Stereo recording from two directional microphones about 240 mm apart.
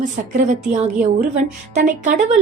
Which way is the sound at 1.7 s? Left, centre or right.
Right.